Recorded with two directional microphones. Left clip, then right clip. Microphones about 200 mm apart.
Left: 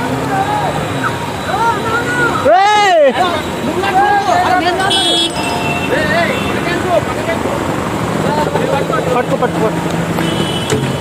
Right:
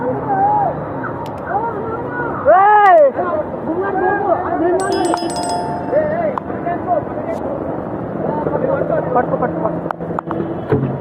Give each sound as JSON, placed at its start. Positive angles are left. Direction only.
{"t": 2.5, "sound": "vehicle", "side_deg": 60}